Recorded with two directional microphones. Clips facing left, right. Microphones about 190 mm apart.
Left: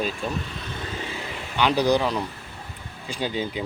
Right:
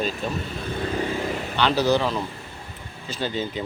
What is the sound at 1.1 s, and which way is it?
Vehicle, 45° right (ahead or behind).